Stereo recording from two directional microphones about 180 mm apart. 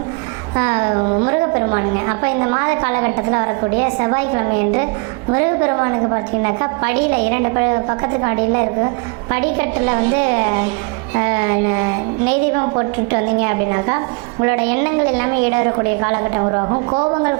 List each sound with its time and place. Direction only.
0.5 s a woman's voice: 20° right (ahead or behind)